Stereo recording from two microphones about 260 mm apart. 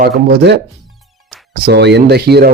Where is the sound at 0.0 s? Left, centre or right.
Right.